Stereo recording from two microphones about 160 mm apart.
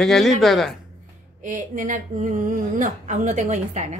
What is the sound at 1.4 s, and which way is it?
A woman's voice, 55° right (ahead or behind).